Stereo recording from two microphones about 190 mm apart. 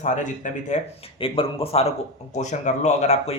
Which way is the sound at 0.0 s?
40° left (ahead or behind).